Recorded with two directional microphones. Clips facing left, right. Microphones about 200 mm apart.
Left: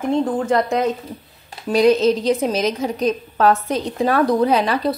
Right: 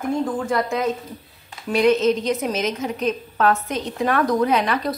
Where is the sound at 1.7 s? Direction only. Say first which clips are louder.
Left 3 dB; 35° left (ahead or behind).